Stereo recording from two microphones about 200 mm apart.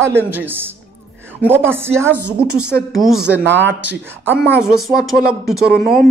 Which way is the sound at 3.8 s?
10° right (ahead or behind).